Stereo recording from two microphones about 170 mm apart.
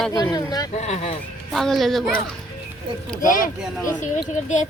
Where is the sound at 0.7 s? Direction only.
40° left (ahead or behind).